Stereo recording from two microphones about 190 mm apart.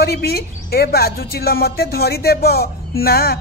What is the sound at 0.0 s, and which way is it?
A woman's voice, 55° left (ahead or behind).